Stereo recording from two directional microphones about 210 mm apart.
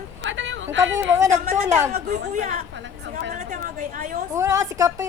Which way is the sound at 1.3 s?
35° right (ahead or behind).